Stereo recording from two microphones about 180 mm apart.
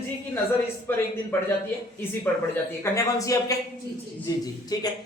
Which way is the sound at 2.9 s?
20° left (ahead or behind).